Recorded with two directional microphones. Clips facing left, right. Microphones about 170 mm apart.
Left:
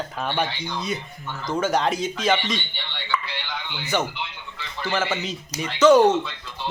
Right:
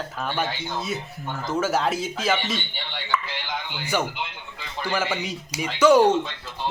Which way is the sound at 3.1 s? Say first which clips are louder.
Even; 5° right (ahead or behind).